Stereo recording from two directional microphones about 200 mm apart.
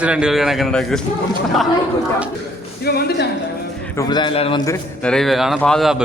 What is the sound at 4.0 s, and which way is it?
Speech, 20° left (ahead or behind).